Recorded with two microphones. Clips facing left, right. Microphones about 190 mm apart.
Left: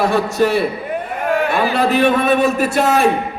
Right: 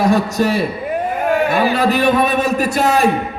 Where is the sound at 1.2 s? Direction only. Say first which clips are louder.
Right 1 dB; centre (ahead or behind).